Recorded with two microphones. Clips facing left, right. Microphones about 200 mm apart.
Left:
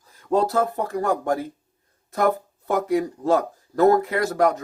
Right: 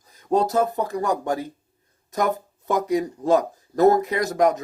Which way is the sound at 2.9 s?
20° right (ahead or behind).